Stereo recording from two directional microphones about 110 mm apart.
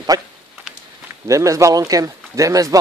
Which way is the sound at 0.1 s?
35° right (ahead or behind).